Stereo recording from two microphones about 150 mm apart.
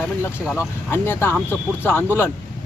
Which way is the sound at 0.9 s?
15° left (ahead or behind).